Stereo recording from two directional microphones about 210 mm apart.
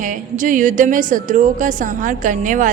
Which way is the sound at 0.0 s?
40° right (ahead or behind).